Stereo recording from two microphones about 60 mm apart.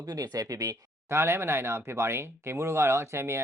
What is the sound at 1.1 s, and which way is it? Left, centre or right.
Speech, right.